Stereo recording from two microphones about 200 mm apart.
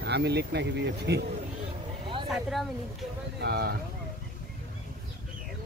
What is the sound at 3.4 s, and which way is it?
Speech, 50° right (ahead or behind).